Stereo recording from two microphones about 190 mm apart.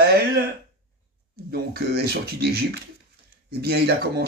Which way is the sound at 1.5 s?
55° right (ahead or behind).